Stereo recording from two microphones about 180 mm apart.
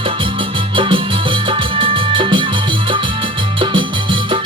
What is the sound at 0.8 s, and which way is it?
Music, 30° right (ahead or behind).